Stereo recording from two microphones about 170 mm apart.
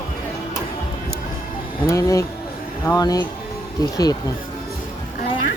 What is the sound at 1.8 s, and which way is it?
Music, 20° left (ahead or behind).